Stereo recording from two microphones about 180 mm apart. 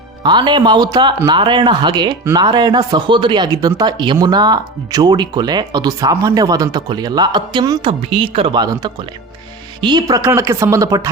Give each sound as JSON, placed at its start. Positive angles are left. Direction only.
{"t": 0.2, "sound": "a woman's voice", "side_deg": -25}